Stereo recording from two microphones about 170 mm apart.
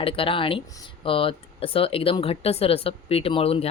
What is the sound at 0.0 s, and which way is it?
Speech, 30° left (ahead or behind).